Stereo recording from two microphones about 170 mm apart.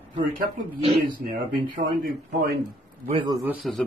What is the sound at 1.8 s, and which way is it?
Speech, 60° right (ahead or behind).